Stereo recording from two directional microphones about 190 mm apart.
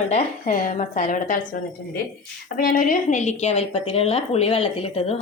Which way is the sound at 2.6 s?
50° left (ahead or behind).